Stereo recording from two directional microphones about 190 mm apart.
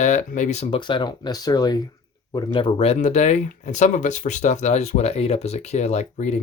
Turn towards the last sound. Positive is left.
turn(degrees=35)  # may be behind; listen again after turning